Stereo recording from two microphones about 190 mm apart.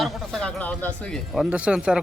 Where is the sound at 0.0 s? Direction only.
5° left (ahead or behind).